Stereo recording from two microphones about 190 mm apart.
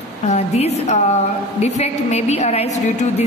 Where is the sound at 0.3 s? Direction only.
35° left (ahead or behind).